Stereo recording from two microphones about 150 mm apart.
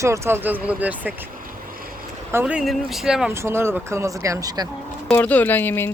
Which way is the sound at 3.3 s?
15° right (ahead or behind).